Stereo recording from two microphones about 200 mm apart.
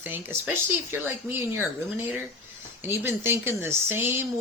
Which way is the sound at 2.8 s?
10° right (ahead or behind).